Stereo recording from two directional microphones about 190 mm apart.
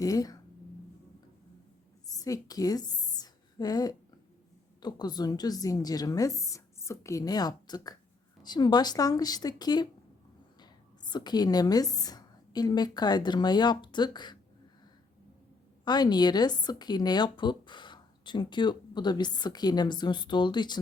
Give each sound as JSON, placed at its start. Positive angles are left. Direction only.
{"t": 0.0, "sound": "speech", "side_deg": 20}
{"t": 2.1, "sound": "a sound", "side_deg": 20}
{"t": 4.8, "sound": "a woman's voice", "side_deg": 20}
{"t": 11.1, "sound": "speech", "side_deg": 20}
{"t": 15.8, "sound": "speech", "side_deg": 20}